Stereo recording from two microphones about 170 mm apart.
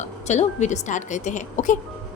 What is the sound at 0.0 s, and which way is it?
A woman's voice, 45° left (ahead or behind).